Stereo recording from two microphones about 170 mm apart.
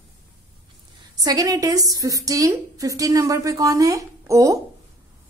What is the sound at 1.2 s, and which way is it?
A woman's voice, 20° right (ahead or behind).